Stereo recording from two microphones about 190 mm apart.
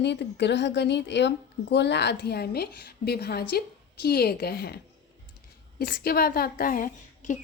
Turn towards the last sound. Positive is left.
turn(degrees=45)  # may be behind; listen again after turning